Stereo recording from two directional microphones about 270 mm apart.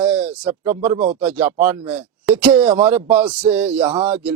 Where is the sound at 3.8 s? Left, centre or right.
Centre.